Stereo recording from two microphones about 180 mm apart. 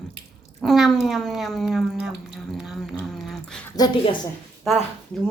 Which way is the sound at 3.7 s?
20° left (ahead or behind).